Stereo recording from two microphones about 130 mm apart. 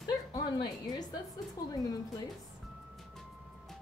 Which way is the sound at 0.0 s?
30° left (ahead or behind).